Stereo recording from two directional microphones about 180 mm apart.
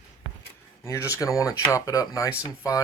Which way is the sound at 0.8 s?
15° left (ahead or behind).